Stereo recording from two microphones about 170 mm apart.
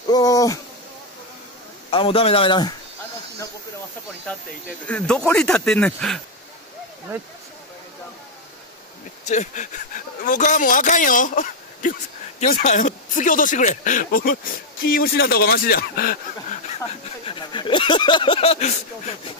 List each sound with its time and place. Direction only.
0.1 s speech: 20° left (ahead or behind)
1.9 s a man's voice: 35° left (ahead or behind)
4.8 s speech: 5° left (ahead or behind)
9.2 s speech: 45° left (ahead or behind)
17.3 s speech: 30° left (ahead or behind)